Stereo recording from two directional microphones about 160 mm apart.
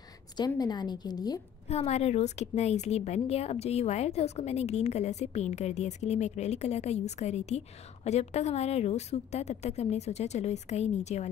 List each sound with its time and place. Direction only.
0.4 s a woman's voice: 25° left (ahead or behind)
1.7 s a woman's voice: 40° left (ahead or behind)